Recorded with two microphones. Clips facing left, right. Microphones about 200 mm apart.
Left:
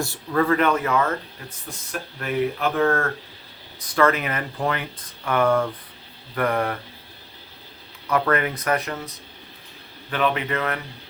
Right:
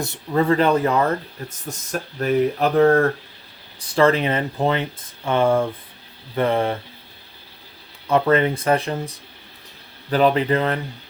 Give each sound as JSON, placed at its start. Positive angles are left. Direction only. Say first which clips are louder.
{"t": 0.0, "sound": "speech", "louder": "right 2 dB", "side_deg": -20}
{"t": 8.0, "sound": "speech", "louder": "right 5 dB", "side_deg": -25}